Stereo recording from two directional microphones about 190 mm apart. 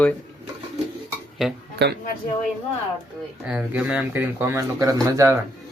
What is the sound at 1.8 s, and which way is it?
Speech, 60° right (ahead or behind).